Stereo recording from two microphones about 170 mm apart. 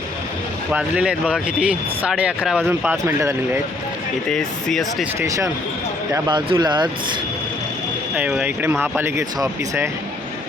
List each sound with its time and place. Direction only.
0.7 s speech: 5° right (ahead or behind)
4.3 s speech: centre (ahead or behind)
6.1 s speech: 25° right (ahead or behind)
8.1 s speech: 5° right (ahead or behind)